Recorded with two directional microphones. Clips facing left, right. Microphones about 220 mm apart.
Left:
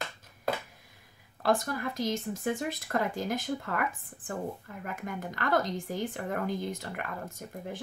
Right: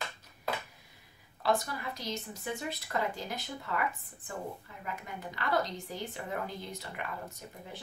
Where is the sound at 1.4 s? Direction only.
50° left (ahead or behind).